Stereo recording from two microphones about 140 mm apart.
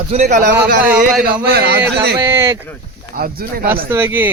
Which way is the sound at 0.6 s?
90° right.